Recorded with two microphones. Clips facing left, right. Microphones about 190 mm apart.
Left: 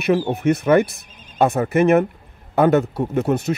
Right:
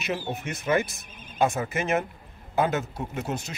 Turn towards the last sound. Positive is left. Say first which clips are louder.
# left 11 dB
turn(degrees=60)  # may be behind; listen again after turning